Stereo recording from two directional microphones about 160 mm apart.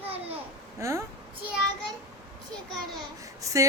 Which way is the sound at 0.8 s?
20° right (ahead or behind).